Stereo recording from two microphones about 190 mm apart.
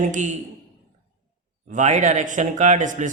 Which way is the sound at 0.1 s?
40° right (ahead or behind).